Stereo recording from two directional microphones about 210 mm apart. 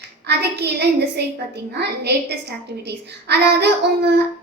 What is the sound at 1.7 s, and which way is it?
A woman's voice, 50° right (ahead or behind).